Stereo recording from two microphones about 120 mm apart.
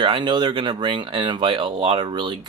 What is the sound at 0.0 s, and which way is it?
Speech, 40° right (ahead or behind).